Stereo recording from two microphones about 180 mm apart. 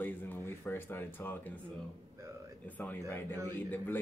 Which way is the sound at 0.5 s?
10° left (ahead or behind).